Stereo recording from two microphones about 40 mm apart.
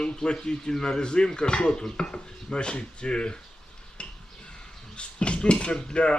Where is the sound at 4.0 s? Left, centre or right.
Left.